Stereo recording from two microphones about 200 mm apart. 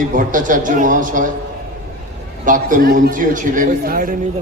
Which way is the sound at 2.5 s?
40° right (ahead or behind).